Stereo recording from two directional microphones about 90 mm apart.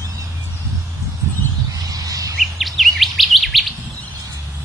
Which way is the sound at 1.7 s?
40° right (ahead or behind).